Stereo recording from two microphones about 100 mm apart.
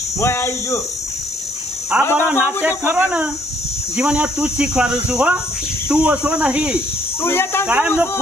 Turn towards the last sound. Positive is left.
turn(degrees=-15)  # may be behind; listen again after turning